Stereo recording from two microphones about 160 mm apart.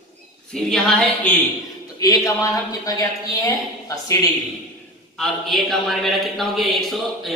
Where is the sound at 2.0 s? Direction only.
20° left (ahead or behind).